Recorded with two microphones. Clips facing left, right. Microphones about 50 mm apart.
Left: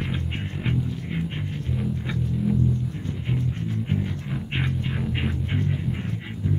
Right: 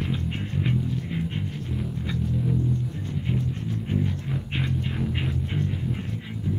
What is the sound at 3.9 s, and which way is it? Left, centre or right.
Music, centre.